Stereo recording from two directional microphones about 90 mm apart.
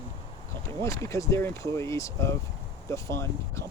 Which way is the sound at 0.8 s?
35° left (ahead or behind).